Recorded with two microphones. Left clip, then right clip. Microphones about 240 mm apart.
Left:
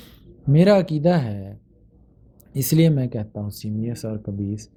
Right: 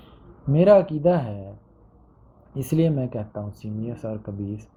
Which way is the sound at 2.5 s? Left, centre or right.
Left.